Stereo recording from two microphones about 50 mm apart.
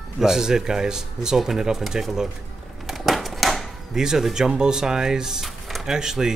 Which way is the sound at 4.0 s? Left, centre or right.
Centre.